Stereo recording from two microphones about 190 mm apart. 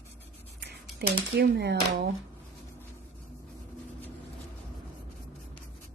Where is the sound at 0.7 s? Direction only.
60° right (ahead or behind).